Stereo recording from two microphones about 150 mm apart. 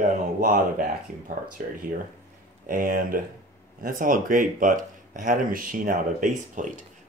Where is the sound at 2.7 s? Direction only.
65° right (ahead or behind).